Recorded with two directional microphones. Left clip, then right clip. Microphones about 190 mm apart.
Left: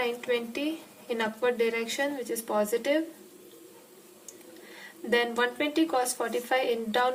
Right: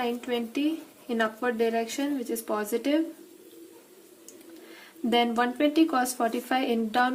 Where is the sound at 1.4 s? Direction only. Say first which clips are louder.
Even; 35° right (ahead or behind).